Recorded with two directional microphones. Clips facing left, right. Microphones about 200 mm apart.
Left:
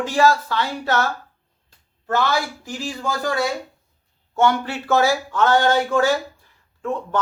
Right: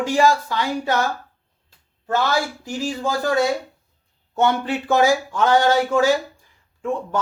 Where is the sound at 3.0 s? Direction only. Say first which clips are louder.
Right 3 dB; 20° right (ahead or behind).